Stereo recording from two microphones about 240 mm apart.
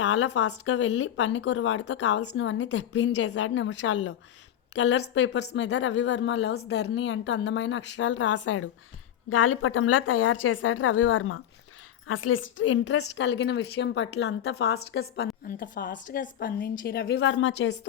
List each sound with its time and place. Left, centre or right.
0.0 s a woman's voice: left